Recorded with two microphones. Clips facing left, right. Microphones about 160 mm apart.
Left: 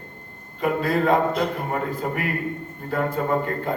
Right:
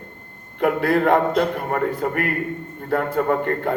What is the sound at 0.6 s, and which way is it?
A man's voice, 60° right (ahead or behind).